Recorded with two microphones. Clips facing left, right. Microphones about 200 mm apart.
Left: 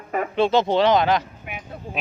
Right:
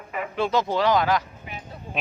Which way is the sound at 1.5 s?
60° left (ahead or behind).